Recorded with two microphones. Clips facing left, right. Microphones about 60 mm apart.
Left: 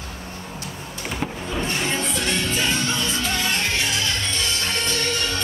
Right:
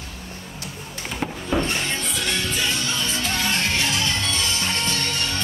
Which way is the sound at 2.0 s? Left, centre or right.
Centre.